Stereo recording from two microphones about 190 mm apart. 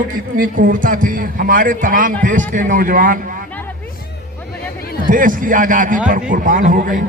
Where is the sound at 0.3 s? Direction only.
45° right (ahead or behind).